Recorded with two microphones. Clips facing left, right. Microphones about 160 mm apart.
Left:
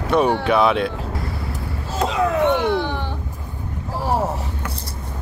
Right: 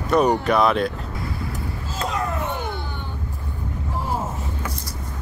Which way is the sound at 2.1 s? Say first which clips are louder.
Left 9 dB; 90° left.